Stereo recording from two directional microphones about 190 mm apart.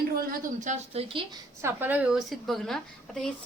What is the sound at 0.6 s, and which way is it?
Speech, 35° right (ahead or behind).